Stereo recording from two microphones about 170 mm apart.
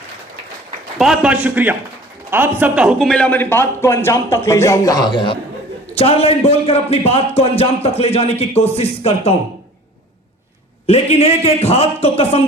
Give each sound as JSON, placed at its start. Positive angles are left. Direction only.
{"t": 0.9, "sound": "a man's voice", "side_deg": -5}
{"t": 10.8, "sound": "a man's voice", "side_deg": 35}